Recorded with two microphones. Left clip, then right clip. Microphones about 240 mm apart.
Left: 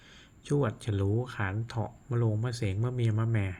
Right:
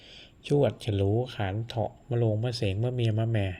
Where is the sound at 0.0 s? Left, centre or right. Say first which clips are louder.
Right 7 dB; centre.